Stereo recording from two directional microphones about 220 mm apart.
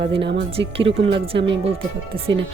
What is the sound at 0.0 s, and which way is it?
Speech, 25° right (ahead or behind).